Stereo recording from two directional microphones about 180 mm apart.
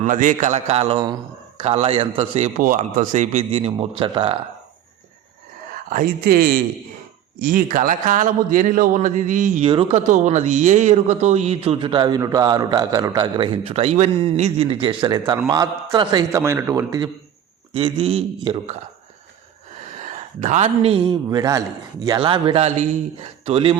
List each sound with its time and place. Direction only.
0.0 s speech: 45° right (ahead or behind); by 2.5 s 30° right (ahead or behind)
2.6 s speech: 45° right (ahead or behind); by 4.4 s 30° right (ahead or behind)
5.9 s a man's voice: 50° right (ahead or behind)
9.6 s a man's voice: 30° right (ahead or behind)
10.1 s a man's voice: 40° right (ahead or behind); by 17.1 s 20° right (ahead or behind)
17.7 s speech: 30° right (ahead or behind)
19.8 s a man's voice: 40° right (ahead or behind)